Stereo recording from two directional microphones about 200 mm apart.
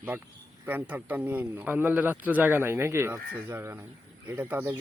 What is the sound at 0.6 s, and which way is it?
Speech, 10° right (ahead or behind).